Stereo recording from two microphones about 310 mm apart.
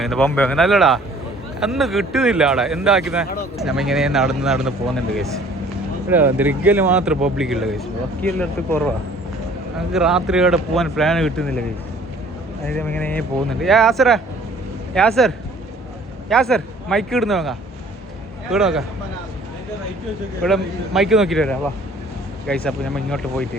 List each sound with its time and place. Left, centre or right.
0.0 s speech: centre
9.9 s speech: centre
12.6 s speech: centre
16.3 s speech: centre
20.4 s speech: centre